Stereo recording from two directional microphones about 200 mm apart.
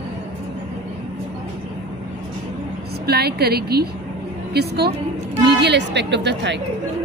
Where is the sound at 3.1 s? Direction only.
55° right (ahead or behind).